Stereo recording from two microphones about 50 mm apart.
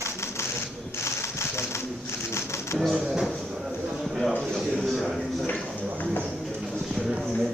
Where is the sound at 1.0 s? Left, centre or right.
Left.